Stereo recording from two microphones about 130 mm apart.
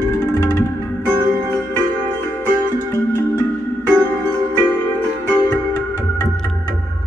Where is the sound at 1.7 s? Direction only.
15° left (ahead or behind).